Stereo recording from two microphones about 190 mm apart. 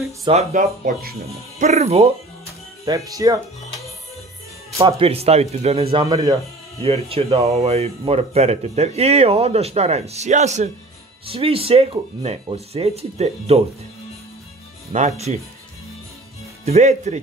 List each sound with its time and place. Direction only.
0.3 s speech: 40° right (ahead or behind)
2.8 s speech: 15° right (ahead or behind)
4.8 s speech: 30° right (ahead or behind)
6.0 s speech: 20° right (ahead or behind)
6.8 s speech: 30° right (ahead or behind)
14.9 s speech: 35° right (ahead or behind)
16.6 s speech: 35° right (ahead or behind)